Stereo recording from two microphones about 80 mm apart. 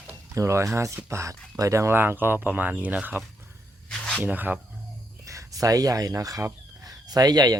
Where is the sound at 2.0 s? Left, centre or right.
Right.